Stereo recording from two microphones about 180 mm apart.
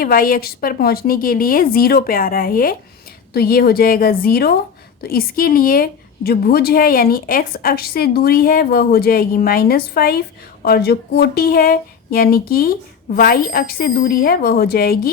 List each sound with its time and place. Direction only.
0.0 s a woman's voice: 55° left (ahead or behind)